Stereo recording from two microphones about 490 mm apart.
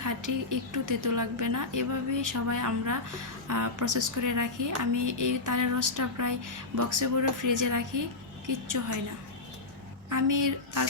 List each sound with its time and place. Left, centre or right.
0.0 s a woman's voice: right
10.1 s a woman's voice: right